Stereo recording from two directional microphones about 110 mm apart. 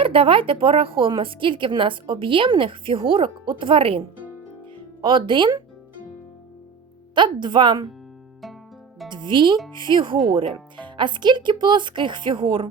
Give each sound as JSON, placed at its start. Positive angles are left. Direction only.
{"t": 0.0, "sound": "speech", "side_deg": -55}
{"t": 5.0, "sound": "speech", "side_deg": -45}
{"t": 7.2, "sound": "speech", "side_deg": -45}
{"t": 9.0, "sound": "speech", "side_deg": -45}